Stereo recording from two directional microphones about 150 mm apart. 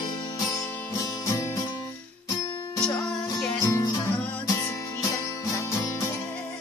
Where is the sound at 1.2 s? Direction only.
20° left (ahead or behind).